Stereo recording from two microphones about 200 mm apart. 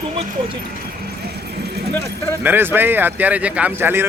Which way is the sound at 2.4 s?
10° right (ahead or behind).